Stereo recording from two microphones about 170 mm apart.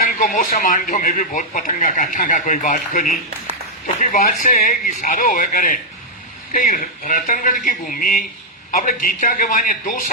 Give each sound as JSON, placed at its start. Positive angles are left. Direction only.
{"t": 0.0, "sound": "speech", "side_deg": 55}